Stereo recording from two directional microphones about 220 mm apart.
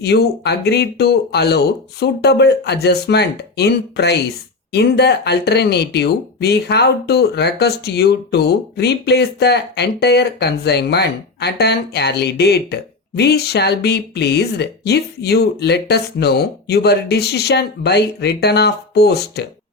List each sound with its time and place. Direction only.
0.0 s speech: 50° left (ahead or behind)